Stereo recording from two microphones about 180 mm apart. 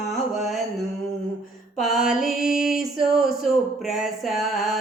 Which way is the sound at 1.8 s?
Centre (ahead or behind).